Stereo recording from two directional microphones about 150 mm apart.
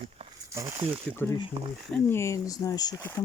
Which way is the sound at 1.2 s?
10° left (ahead or behind).